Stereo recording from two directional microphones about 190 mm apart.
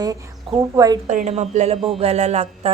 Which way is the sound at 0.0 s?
20° right (ahead or behind).